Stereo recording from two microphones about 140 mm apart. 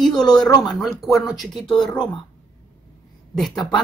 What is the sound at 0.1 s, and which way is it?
Speech, 30° left (ahead or behind).